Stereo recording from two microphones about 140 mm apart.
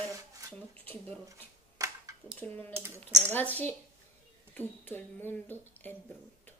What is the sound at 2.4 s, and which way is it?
Speech, 10° left (ahead or behind).